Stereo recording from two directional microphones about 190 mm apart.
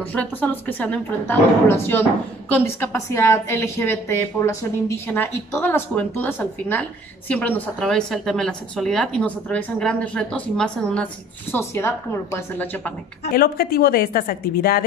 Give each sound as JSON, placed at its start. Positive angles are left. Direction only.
{"t": 0.1, "sound": "a woman's voice", "side_deg": 10}
{"t": 13.3, "sound": "a woman's voice", "side_deg": 50}